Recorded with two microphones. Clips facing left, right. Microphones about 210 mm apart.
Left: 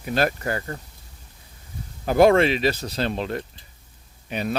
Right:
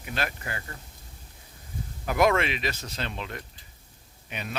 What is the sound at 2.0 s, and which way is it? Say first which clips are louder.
Speech: left 8 dB; 30° left (ahead or behind).